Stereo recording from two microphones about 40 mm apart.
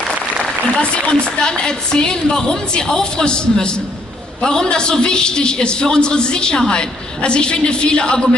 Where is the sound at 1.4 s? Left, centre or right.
Centre.